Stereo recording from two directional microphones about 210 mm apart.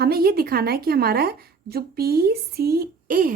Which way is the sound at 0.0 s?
45° right (ahead or behind).